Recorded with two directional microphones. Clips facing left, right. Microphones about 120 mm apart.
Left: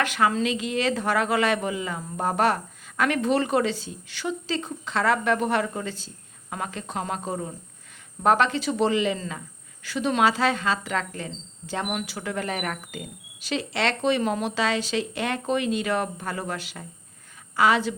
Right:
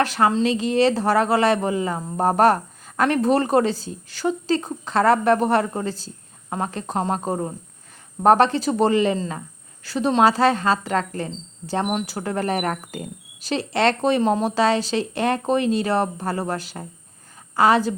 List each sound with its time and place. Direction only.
0.0 s a woman's voice: 35° right (ahead or behind)